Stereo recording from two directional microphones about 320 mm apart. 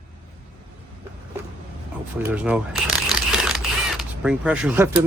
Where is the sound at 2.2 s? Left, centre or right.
Centre.